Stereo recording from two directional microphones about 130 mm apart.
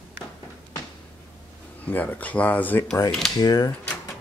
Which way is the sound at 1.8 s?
10° left (ahead or behind).